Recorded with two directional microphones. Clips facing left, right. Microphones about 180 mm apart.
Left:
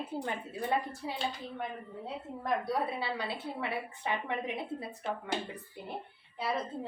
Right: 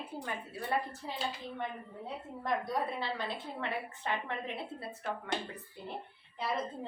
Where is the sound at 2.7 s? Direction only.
10° left (ahead or behind).